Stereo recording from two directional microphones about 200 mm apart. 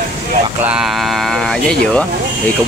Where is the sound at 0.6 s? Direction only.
5° right (ahead or behind).